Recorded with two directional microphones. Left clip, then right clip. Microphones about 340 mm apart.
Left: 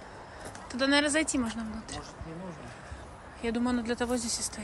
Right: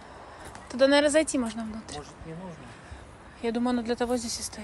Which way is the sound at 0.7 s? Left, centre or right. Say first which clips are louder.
Right 5 dB; centre.